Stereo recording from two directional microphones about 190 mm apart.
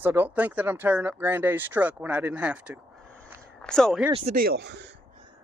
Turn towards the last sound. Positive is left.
turn(degrees=-65)  # may be behind; listen again after turning